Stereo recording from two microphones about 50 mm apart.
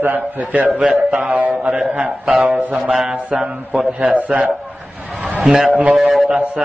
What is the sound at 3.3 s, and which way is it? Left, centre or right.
A man's voice, right.